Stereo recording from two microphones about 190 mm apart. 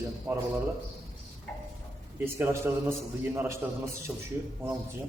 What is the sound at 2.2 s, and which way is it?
A man's voice, 10° right (ahead or behind).